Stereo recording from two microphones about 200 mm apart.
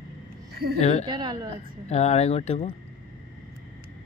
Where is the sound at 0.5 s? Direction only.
50° right (ahead or behind).